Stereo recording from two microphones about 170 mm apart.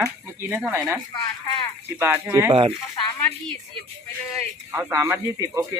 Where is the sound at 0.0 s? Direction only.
10° right (ahead or behind).